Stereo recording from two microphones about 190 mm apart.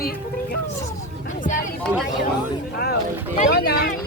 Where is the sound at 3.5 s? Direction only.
55° left (ahead or behind).